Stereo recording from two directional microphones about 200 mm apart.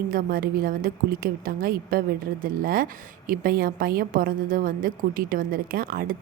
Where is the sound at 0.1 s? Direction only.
45° right (ahead or behind).